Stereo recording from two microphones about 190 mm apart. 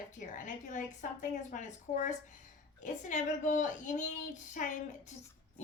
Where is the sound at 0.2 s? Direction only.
40° left (ahead or behind).